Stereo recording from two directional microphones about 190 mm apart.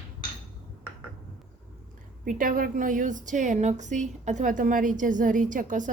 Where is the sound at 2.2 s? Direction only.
45° right (ahead or behind).